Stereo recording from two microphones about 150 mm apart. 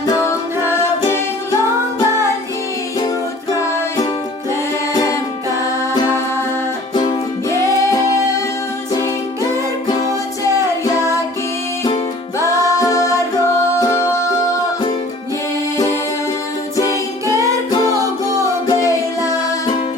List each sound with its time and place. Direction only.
0.0 s music: 25° left (ahead or behind)
5.9 s music: 20° left (ahead or behind)
8.9 s music: 25° left (ahead or behind)
12.5 s music: 20° left (ahead or behind)
16.7 s music: 20° left (ahead or behind)
18.7 s music: 25° left (ahead or behind)